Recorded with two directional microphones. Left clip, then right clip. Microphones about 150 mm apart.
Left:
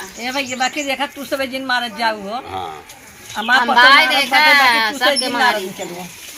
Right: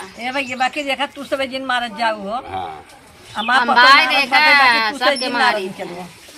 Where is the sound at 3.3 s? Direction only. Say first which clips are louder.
Left 1 dB; centre (ahead or behind).